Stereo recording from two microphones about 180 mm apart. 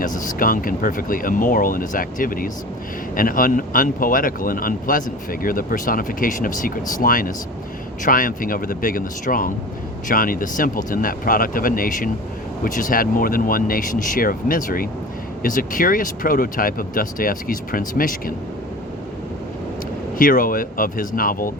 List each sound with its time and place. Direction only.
0.0 s speech: 50° left (ahead or behind)
20.1 s speech: 50° left (ahead or behind)